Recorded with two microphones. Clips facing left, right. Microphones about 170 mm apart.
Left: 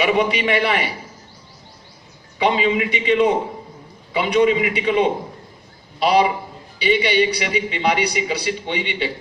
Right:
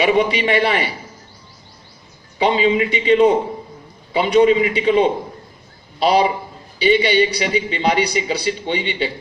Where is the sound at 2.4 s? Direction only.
30° right (ahead or behind).